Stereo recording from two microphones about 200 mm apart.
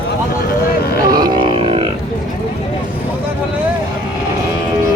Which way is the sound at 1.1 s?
20° right (ahead or behind).